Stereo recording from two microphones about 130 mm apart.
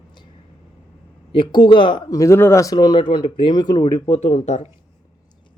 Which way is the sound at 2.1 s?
25° left (ahead or behind).